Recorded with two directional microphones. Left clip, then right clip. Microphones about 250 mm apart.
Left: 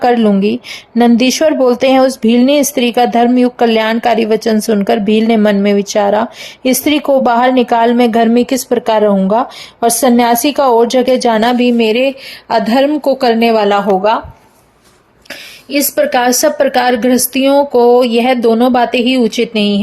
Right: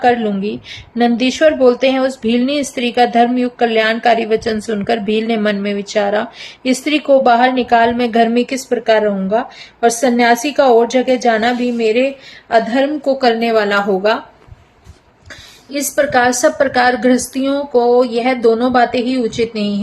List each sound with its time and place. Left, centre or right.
0.0 s a woman's voice: left
15.3 s a woman's voice: left